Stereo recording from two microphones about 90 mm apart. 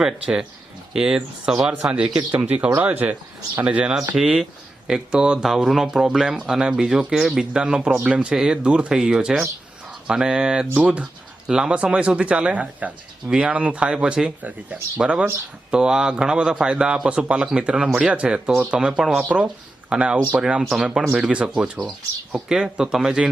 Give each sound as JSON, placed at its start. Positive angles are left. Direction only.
{"t": 0.0, "sound": "speech", "side_deg": -5}